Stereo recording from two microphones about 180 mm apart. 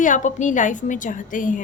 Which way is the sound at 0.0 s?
45° left (ahead or behind).